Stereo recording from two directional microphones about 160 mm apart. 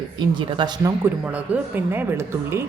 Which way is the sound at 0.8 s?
15° right (ahead or behind).